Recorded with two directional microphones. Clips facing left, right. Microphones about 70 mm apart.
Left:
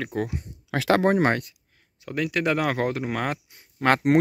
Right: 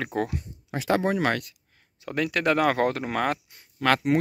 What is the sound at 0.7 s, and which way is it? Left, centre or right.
Speech, left.